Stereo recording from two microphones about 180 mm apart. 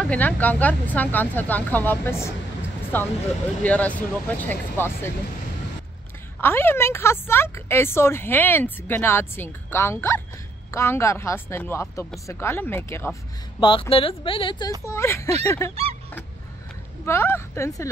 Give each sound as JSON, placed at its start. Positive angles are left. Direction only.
{"t": 0.0, "sound": "speech", "side_deg": 10}
{"t": 6.4, "sound": "speech", "side_deg": 10}
{"t": 13.6, "sound": "speech", "side_deg": 30}
{"t": 14.9, "sound": "speech", "side_deg": 15}
{"t": 17.0, "sound": "speech", "side_deg": 15}